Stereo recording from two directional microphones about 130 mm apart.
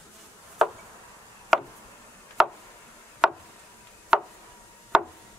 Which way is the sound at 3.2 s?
Centre (ahead or behind).